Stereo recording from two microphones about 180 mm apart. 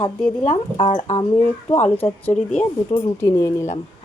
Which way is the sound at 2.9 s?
25° left (ahead or behind).